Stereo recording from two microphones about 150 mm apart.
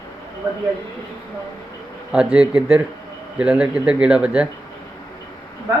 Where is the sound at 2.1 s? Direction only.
5° right (ahead or behind).